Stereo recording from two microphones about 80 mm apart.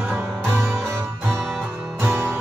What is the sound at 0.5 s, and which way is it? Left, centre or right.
Music, right.